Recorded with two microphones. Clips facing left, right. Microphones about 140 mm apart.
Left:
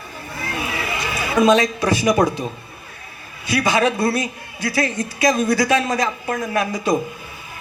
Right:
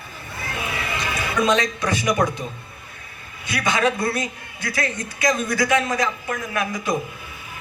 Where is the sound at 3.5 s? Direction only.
30° left (ahead or behind).